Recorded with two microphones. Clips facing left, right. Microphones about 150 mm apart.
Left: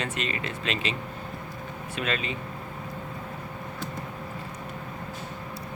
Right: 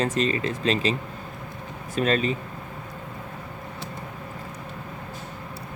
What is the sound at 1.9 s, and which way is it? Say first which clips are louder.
Speech: right 8 dB; 40° right (ahead or behind).